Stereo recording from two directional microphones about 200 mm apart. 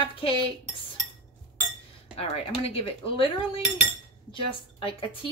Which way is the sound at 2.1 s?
30° left (ahead or behind).